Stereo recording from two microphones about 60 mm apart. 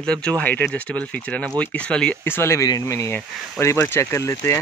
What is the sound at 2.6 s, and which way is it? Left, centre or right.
Speech, left.